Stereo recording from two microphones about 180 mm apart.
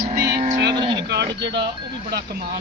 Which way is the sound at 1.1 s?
70° right (ahead or behind).